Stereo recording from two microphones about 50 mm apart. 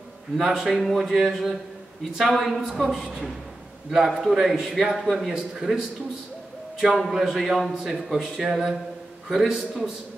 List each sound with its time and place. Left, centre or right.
0.4 s a woman's voice: centre
7.1 s a woman's voice: centre